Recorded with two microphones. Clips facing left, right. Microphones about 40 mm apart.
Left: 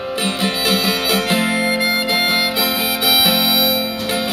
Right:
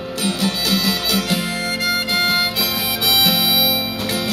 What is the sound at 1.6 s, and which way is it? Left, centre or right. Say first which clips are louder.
Music: left 3 dB; centre.